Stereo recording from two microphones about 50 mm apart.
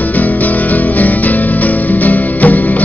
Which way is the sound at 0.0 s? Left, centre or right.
Left.